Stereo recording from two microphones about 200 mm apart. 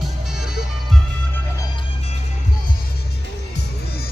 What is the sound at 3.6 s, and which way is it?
Music, 50° left (ahead or behind).